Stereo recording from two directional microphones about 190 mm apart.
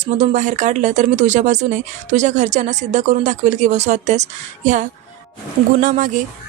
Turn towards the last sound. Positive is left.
turn(degrees=-45)  # may be behind; listen again after turning